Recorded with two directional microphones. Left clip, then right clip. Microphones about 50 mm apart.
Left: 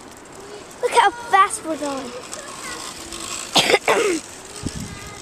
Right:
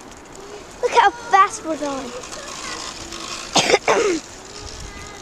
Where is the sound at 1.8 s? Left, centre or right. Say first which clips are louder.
Right 1 dB; right.